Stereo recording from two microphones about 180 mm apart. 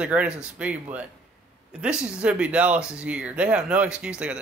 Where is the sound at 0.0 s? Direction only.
5° right (ahead or behind).